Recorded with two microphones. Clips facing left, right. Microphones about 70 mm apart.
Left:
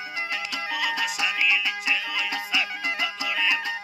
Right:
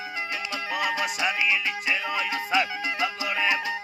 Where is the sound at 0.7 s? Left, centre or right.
Right.